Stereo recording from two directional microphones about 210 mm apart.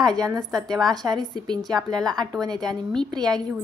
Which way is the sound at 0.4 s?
Centre (ahead or behind).